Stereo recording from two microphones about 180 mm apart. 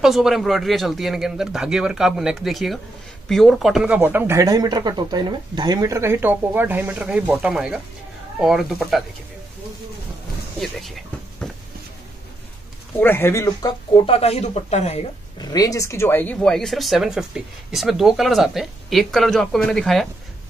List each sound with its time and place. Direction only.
0.0 s speech: centre (ahead or behind)
13.0 s speech: 10° left (ahead or behind); by 15.0 s 35° left (ahead or behind)
15.3 s speech: 20° left (ahead or behind); by 20.1 s 5° left (ahead or behind)